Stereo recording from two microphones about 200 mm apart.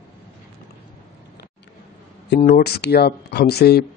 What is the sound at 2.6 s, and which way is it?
Speech, 55° left (ahead or behind).